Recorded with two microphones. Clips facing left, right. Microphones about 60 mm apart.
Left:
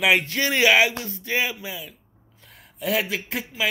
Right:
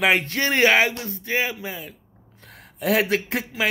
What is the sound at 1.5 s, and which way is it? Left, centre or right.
Speech, right.